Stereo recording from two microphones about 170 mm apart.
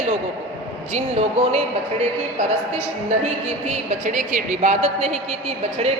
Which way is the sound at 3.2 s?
45° right (ahead or behind).